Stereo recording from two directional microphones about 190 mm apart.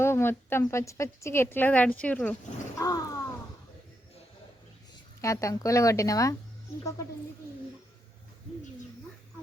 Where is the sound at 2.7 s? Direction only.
15° left (ahead or behind).